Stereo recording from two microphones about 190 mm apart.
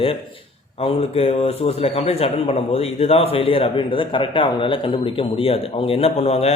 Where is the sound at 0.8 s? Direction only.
30° left (ahead or behind).